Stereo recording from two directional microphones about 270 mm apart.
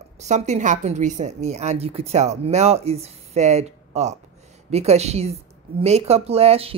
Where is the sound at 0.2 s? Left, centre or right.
Right.